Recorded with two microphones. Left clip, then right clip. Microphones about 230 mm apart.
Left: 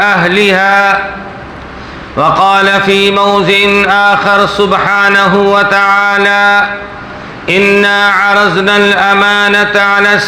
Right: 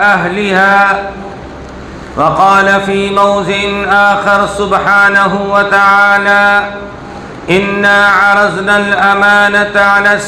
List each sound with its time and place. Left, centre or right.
0.0 s mantra: left
2.1 s mantra: left